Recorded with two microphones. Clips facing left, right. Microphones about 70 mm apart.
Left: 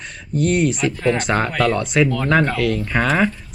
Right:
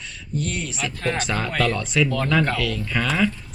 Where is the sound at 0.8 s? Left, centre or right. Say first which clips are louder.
Left 7 dB; centre.